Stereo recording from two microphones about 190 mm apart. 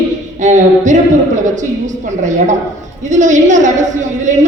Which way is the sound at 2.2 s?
40° right (ahead or behind).